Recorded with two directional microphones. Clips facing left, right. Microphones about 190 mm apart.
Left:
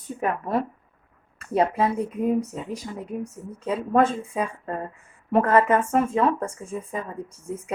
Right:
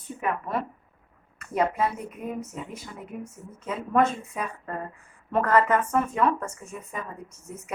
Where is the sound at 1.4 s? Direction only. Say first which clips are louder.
Left 3 dB; 30° left (ahead or behind).